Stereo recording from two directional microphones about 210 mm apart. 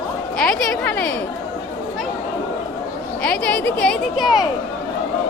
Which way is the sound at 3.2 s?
5° left (ahead or behind).